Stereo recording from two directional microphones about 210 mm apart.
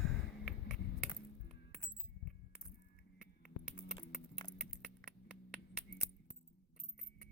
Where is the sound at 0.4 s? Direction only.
Centre (ahead or behind).